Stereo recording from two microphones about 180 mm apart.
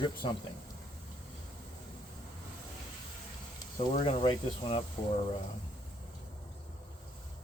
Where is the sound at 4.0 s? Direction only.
30° left (ahead or behind).